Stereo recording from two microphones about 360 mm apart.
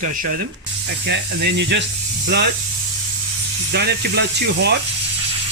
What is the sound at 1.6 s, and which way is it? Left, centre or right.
Speech, right.